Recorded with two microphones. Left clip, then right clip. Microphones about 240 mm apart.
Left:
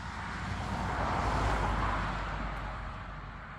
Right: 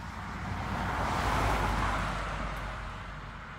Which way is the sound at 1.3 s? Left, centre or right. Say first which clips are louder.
Right 2 dB; right.